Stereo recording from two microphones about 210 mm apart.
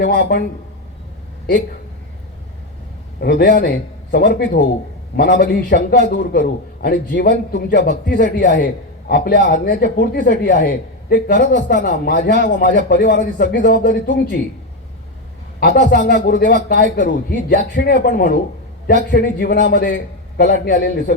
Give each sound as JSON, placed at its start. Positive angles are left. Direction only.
{"t": 0.0, "sound": "a man's voice", "side_deg": 50}
{"t": 3.2, "sound": "a man's voice", "side_deg": 45}
{"t": 15.6, "sound": "a man's voice", "side_deg": 50}
{"t": 18.0, "sound": "a man's voice", "side_deg": 45}